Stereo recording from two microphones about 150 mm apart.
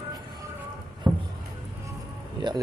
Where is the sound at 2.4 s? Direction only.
30° right (ahead or behind).